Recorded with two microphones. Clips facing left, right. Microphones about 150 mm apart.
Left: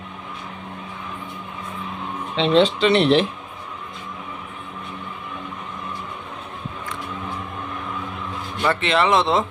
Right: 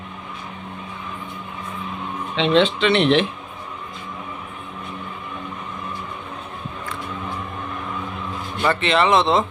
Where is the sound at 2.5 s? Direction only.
35° left (ahead or behind).